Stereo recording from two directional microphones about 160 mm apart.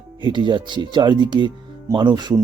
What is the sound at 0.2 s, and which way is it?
Speech, 30° right (ahead or behind).